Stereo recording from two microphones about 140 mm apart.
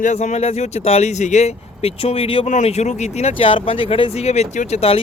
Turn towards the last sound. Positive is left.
turn(degrees=45)  # may be behind; listen again after turning